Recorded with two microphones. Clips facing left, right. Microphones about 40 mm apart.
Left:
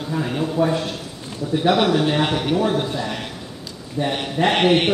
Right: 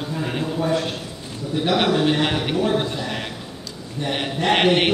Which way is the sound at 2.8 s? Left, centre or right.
Centre.